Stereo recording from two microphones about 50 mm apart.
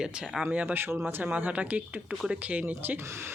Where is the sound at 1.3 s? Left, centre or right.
Right.